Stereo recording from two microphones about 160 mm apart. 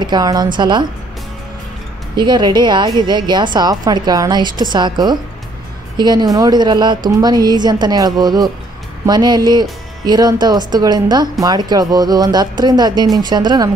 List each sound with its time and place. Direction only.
0.0 s speech: 25° right (ahead or behind)
2.1 s a woman's voice: 30° right (ahead or behind)